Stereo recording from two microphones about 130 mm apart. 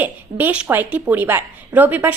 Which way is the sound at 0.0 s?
15° right (ahead or behind).